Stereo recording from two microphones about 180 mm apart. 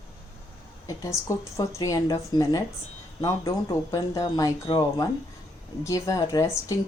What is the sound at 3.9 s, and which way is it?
Speech, 20° left (ahead or behind).